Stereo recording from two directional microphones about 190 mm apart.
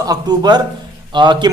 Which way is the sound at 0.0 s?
20° right (ahead or behind).